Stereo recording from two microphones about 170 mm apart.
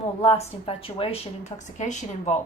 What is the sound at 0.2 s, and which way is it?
Speech, 35° left (ahead or behind).